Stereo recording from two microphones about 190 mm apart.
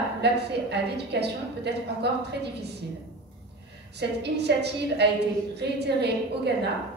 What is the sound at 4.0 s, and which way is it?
A woman's voice, 60° right (ahead or behind).